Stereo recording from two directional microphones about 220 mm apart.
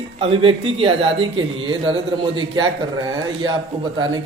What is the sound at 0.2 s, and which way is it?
Speech, 25° right (ahead or behind).